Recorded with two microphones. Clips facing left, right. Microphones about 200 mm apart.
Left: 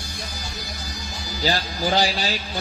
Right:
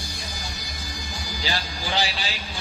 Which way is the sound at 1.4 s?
40° left (ahead or behind).